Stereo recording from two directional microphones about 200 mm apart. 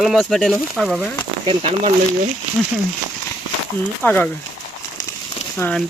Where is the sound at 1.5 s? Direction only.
30° right (ahead or behind).